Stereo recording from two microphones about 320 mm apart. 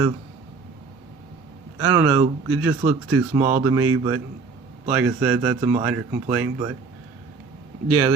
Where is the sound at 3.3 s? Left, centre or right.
Centre.